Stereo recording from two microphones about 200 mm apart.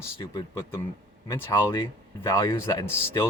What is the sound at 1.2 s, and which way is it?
Speech, 15° left (ahead or behind).